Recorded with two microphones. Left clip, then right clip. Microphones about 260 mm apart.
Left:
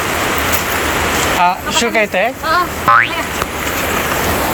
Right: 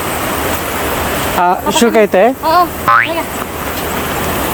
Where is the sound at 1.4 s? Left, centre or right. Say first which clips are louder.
Right 3 dB; right.